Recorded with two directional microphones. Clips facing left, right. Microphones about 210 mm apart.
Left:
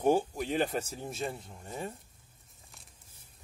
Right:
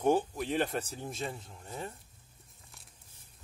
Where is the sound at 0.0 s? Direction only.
5° left (ahead or behind).